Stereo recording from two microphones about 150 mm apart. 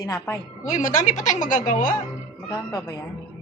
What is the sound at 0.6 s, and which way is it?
A woman's voice, 60° left (ahead or behind).